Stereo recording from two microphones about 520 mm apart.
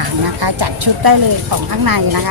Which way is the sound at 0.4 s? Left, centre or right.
Right.